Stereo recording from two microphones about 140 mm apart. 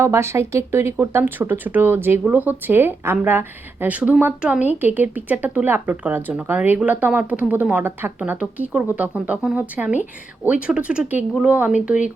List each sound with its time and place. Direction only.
0.0 s speech: 20° right (ahead or behind)